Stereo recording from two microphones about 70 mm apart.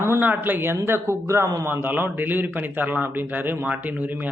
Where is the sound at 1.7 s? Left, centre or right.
Right.